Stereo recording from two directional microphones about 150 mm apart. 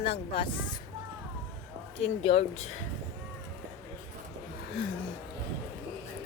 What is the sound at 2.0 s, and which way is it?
Speech, 45° left (ahead or behind).